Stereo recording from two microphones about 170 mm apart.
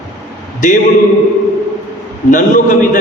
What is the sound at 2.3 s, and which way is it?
Speech, 50° left (ahead or behind).